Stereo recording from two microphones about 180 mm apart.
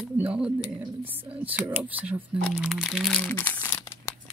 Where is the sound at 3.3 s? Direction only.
10° left (ahead or behind).